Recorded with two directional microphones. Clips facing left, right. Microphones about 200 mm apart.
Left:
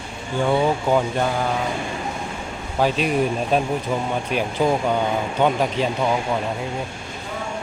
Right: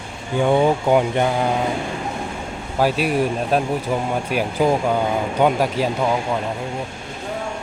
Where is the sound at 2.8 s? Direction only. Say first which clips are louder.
Right 1 dB; 5° right (ahead or behind).